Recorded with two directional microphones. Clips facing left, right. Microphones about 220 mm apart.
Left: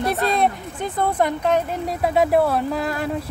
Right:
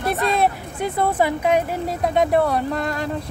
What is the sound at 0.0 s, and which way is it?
Speech, centre (ahead or behind).